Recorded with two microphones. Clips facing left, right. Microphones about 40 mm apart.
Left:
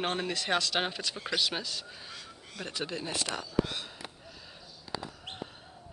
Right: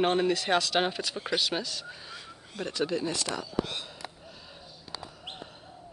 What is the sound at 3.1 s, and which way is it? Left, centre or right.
Speech, left.